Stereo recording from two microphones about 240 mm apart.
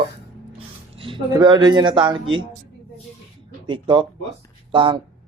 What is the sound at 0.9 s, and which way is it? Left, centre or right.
Speech, right.